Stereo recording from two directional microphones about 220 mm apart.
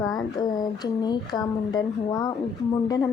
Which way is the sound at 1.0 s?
20° left (ahead or behind).